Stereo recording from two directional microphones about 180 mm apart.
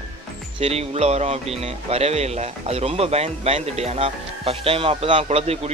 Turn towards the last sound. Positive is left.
turn(degrees=-35)  # may be behind; listen again after turning